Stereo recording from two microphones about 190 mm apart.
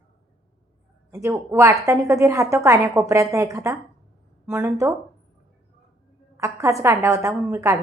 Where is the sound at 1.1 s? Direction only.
15° right (ahead or behind).